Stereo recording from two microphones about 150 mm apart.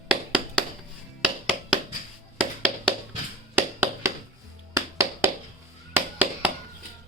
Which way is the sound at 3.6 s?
15° right (ahead or behind).